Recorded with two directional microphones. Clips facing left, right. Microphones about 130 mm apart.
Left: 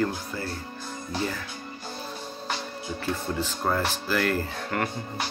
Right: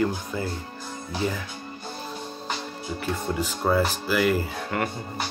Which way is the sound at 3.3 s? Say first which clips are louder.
Right 6 dB; 10° right (ahead or behind).